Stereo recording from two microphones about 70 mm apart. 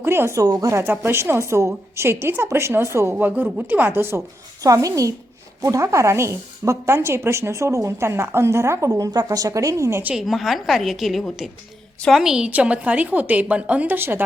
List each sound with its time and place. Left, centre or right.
0.0 s a woman's voice: right
0.3 s speech: right
0.8 s a woman's voice: right
3.2 s a woman's voice: right
4.6 s a woman's voice: right
10.2 s a woman's voice: centre
12.5 s a woman's voice: centre